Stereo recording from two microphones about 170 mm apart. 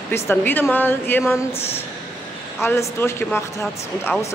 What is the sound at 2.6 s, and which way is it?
Speech, 15° left (ahead or behind).